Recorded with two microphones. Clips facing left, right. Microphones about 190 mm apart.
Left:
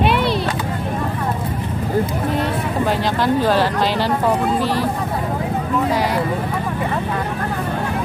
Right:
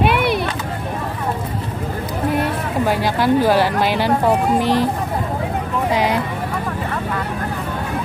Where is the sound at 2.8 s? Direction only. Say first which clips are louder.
Right 2 dB; 10° right (ahead or behind).